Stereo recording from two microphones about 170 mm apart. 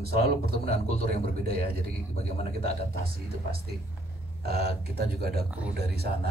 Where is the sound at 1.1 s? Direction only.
65° right (ahead or behind).